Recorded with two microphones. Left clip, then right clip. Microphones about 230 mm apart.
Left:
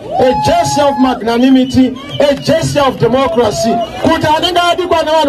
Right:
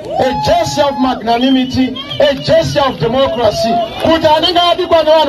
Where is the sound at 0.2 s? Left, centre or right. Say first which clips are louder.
Left 2 dB; left.